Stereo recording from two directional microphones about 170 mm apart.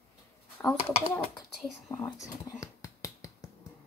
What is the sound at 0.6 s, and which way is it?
Speech, 10° left (ahead or behind).